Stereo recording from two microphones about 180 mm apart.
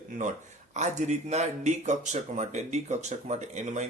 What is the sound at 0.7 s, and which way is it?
Speech, 40° right (ahead or behind).